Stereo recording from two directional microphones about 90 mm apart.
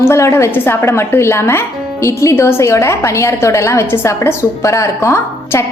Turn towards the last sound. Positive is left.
turn(degrees=30)  # may be behind; listen again after turning